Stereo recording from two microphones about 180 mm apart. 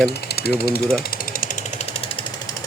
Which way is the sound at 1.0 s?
55° left (ahead or behind).